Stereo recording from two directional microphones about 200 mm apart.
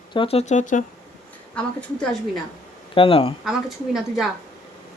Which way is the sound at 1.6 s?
5° left (ahead or behind).